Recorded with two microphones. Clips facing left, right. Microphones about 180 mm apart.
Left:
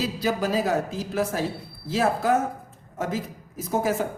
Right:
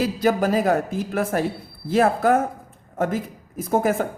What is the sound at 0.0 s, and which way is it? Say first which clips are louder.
A woman's voice: right 5 dB; 50° right (ahead or behind).